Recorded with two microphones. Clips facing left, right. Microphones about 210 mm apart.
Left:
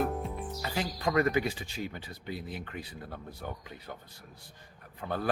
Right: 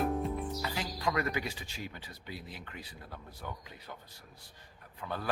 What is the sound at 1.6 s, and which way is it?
Speech, 50° left (ahead or behind).